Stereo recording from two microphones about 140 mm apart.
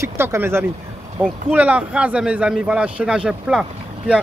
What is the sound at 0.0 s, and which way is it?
A man's voice, 20° right (ahead or behind).